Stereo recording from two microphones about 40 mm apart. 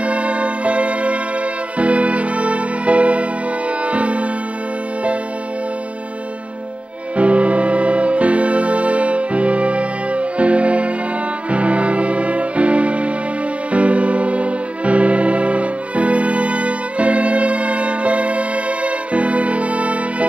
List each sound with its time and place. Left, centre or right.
0.0 s music: right
7.2 s music: right